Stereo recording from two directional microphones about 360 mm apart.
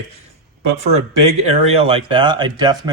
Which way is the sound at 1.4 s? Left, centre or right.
Centre.